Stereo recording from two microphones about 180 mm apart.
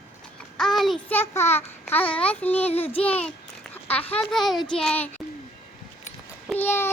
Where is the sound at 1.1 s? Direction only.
15° left (ahead or behind).